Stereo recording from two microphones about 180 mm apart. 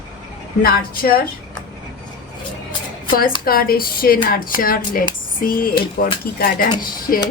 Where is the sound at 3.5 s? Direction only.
55° left (ahead or behind).